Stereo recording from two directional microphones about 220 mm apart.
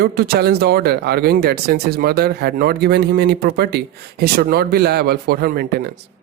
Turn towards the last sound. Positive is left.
turn(degrees=-45)  # may be behind; listen again after turning